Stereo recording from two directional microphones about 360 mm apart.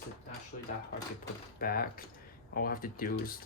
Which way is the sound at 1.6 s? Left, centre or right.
Left.